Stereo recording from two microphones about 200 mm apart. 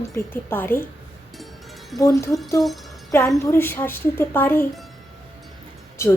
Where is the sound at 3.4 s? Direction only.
10° left (ahead or behind).